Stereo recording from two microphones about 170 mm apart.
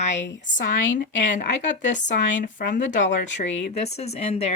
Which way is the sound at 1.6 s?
45° left (ahead or behind).